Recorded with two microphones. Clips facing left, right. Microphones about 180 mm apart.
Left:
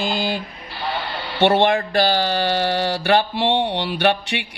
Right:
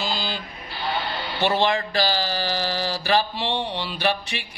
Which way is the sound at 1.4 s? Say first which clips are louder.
Left 6 dB; 60° left (ahead or behind).